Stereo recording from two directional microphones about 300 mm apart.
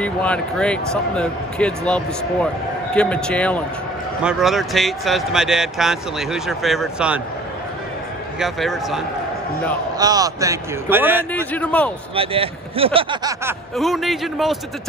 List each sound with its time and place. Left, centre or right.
0.0 s speech: centre
8.4 s speech: centre
9.9 s speech: centre
11.3 s speech: centre
12.2 s speech: centre
13.7 s speech: centre